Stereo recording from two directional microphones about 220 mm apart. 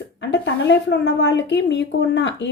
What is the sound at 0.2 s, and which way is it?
A woman's voice, 55° left (ahead or behind).